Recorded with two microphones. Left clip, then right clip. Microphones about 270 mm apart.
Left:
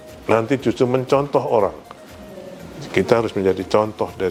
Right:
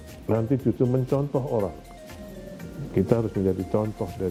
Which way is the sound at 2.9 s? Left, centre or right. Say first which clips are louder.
Left 7 dB; centre.